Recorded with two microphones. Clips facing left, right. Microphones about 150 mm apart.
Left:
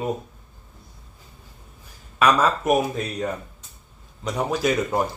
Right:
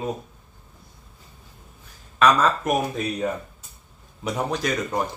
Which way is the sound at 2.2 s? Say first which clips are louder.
Even; 5° left (ahead or behind).